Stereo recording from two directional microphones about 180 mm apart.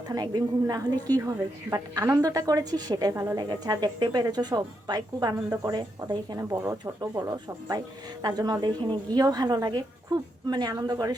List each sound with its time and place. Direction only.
0.1 s a woman's voice: 20° right (ahead or behind)